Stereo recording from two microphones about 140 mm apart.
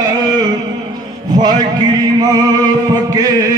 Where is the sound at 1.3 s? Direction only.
30° right (ahead or behind).